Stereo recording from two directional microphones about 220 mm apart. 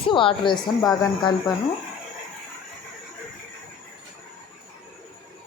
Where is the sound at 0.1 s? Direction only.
20° left (ahead or behind).